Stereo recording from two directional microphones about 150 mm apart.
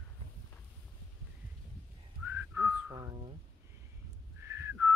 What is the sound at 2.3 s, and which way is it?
Whistling, 15° right (ahead or behind).